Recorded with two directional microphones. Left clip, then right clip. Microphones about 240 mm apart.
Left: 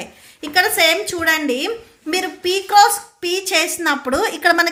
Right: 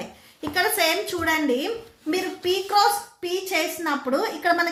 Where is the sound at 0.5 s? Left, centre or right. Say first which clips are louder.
Left 7 dB; left.